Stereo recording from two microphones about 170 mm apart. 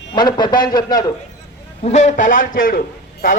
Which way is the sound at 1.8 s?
40° left (ahead or behind).